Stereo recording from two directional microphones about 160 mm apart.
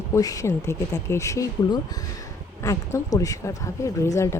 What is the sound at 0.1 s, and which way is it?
Speech, 20° left (ahead or behind).